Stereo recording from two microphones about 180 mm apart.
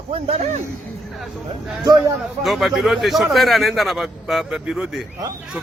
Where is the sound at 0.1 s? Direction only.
35° right (ahead or behind).